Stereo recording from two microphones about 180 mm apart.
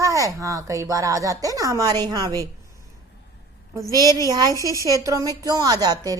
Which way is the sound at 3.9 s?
20° right (ahead or behind).